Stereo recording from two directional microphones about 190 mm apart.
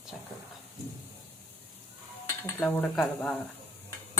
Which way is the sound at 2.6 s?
10° left (ahead or behind).